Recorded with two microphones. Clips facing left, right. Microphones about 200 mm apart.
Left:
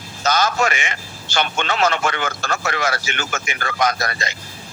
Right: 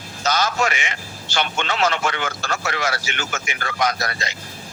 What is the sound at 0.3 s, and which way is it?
A man's voice, 50° left (ahead or behind).